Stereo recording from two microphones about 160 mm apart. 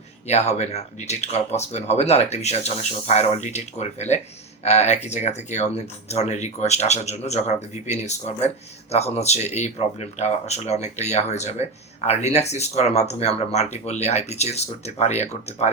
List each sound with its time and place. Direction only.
0.3 s speech: 45° left (ahead or behind)